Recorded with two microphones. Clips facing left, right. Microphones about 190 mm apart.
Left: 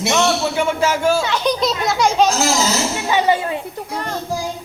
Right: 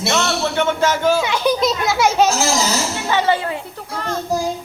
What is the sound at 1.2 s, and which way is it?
Children playing, 10° right (ahead or behind).